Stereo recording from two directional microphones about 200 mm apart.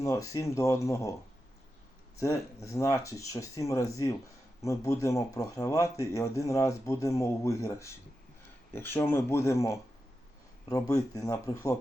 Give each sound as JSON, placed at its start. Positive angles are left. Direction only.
{"t": 0.0, "sound": "speech", "side_deg": 15}
{"t": 2.1, "sound": "speech", "side_deg": 15}